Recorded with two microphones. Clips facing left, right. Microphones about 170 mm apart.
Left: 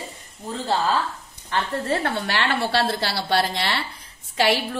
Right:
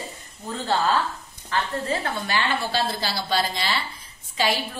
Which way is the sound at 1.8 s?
70° left (ahead or behind).